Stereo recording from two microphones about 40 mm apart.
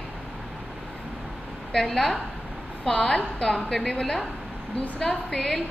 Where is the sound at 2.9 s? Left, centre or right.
Left.